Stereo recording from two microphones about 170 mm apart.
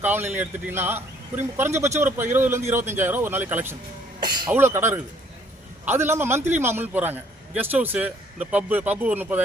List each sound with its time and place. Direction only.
0.0 s a man's voice: 10° right (ahead or behind)
4.2 s speech: 25° right (ahead or behind)
4.5 s a man's voice: 15° right (ahead or behind)